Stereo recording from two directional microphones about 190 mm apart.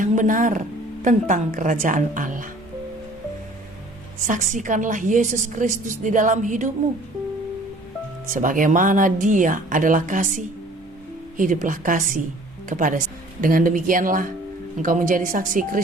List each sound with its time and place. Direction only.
0.0 s speech: 45° right (ahead or behind)
4.3 s a woman's voice: 40° right (ahead or behind)
8.3 s speech: 45° right (ahead or behind)